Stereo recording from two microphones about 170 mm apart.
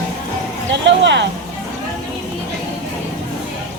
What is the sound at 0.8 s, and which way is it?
Speech, 90° right.